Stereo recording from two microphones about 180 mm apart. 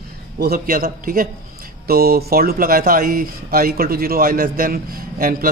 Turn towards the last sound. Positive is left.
turn(degrees=-55)  # may be behind; listen again after turning